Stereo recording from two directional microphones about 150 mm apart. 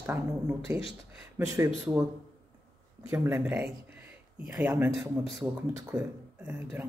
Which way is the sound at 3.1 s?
10° right (ahead or behind).